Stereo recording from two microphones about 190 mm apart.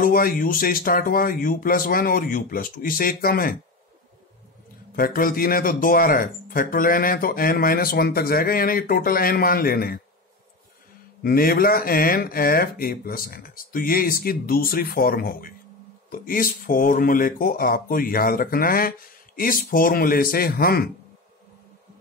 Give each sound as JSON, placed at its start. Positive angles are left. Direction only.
{"t": 0.0, "sound": "a man's voice", "side_deg": 50}
{"t": 4.9, "sound": "a man's voice", "side_deg": 50}
{"t": 11.2, "sound": "a man's voice", "side_deg": 50}